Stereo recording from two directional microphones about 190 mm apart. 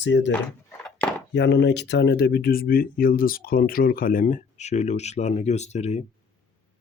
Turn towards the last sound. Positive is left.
turn(degrees=35)  # may be behind; listen again after turning